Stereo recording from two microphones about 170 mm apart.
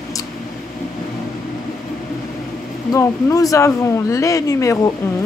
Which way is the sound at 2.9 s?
20° left (ahead or behind).